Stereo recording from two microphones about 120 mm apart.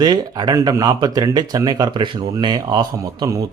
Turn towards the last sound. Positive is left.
turn(degrees=-30)  # may be behind; listen again after turning